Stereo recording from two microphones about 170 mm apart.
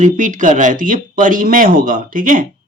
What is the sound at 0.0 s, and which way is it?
Speech, 50° right (ahead or behind).